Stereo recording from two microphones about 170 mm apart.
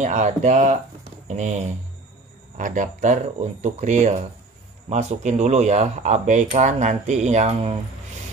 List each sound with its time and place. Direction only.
0.0 s speech: 45° right (ahead or behind)